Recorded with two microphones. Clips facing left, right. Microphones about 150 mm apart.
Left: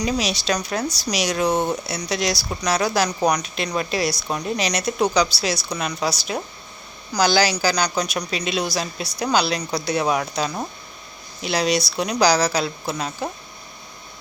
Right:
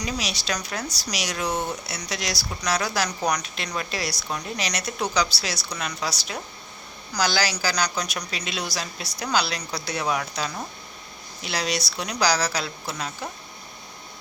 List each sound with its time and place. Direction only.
0.0 s a woman's voice: 25° left (ahead or behind)